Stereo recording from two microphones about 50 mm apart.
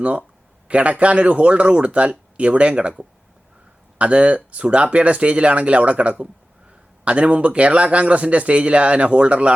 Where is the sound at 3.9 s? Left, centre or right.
Right.